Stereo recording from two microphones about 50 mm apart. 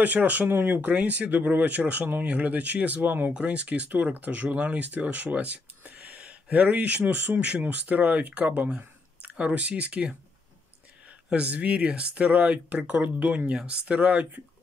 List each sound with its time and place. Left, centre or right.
0.0 s speech: right
3.3 s speech: right
11.2 s speech: right